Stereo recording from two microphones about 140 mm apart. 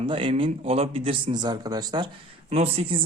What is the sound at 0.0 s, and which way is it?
Speech, 40° right (ahead or behind).